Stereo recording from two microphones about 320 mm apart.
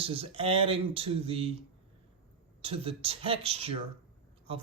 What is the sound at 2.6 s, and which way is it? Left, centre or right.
A man's voice, centre.